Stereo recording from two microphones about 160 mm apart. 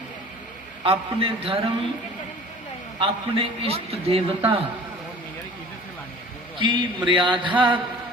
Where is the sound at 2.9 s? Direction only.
40° right (ahead or behind).